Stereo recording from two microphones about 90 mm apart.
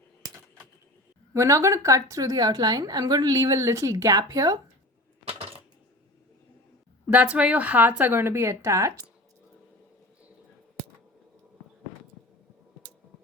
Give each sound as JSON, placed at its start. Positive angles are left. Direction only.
{"t": 1.3, "sound": "a woman's voice", "side_deg": -35}
{"t": 7.1, "sound": "a woman's voice", "side_deg": -15}